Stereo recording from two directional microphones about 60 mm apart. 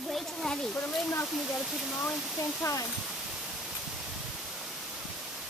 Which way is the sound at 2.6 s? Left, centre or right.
Left.